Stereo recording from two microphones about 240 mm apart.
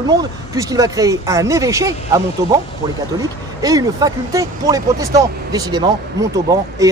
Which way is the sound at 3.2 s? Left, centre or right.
Centre.